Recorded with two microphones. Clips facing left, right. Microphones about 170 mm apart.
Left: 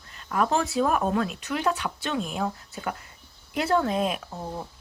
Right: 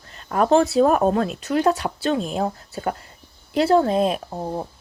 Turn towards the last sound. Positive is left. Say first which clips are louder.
# right 7 dB
turn(degrees=-35)  # may be behind; listen again after turning